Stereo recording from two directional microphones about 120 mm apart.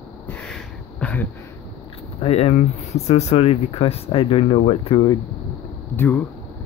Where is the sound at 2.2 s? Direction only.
60° left (ahead or behind).